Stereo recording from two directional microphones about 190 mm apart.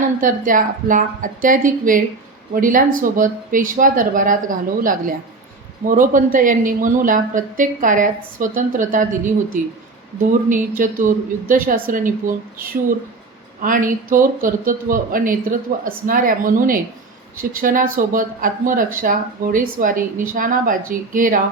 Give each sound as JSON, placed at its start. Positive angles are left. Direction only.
{"t": 0.2, "sound": "speech", "side_deg": -45}